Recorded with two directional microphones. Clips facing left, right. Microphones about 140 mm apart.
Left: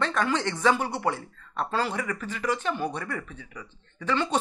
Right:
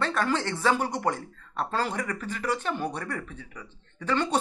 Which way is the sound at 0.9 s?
10° left (ahead or behind).